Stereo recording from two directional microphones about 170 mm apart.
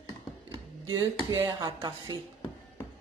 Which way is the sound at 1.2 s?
25° right (ahead or behind).